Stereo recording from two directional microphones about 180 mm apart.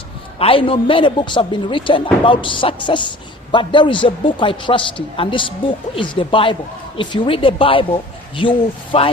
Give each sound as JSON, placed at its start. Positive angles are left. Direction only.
{"t": 0.3, "sound": "a man's voice", "side_deg": 30}